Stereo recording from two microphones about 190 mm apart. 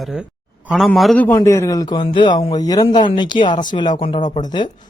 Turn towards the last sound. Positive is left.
turn(degrees=20)  # may be behind; listen again after turning